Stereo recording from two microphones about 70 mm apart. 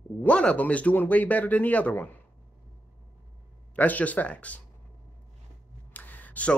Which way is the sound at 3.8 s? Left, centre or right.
Left.